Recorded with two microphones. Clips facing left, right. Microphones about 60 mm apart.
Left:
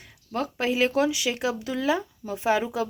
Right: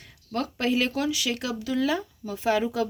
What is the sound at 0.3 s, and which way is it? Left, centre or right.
Speech, left.